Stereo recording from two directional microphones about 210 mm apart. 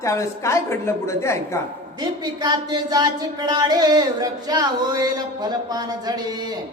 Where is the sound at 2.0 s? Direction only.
20° right (ahead or behind).